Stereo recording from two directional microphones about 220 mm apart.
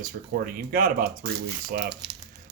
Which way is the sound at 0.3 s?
40° right (ahead or behind).